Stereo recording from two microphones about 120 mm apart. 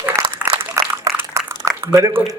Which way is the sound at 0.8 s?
25° right (ahead or behind).